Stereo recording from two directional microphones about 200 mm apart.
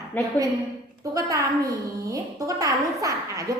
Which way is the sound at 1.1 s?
15° right (ahead or behind).